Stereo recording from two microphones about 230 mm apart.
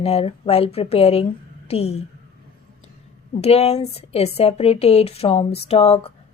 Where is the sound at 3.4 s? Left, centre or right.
Left.